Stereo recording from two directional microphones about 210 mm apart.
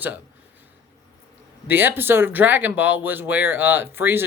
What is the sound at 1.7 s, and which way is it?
Speech, 10° right (ahead or behind).